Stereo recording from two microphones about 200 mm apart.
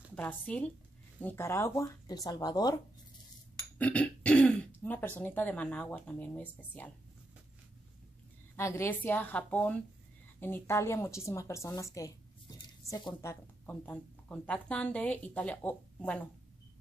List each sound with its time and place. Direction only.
0.1 s speech: 10° left (ahead or behind)
3.7 s throat clearing: 5° left (ahead or behind)
5.2 s speech: 10° left (ahead or behind)
8.5 s a woman's voice: 15° left (ahead or behind)